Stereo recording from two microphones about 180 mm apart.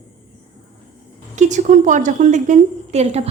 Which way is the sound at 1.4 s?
40° right (ahead or behind).